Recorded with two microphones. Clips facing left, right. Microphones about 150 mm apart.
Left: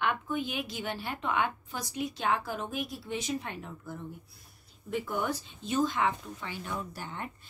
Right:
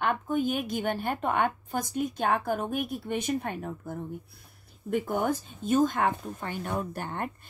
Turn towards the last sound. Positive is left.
turn(degrees=-55)  # may be behind; listen again after turning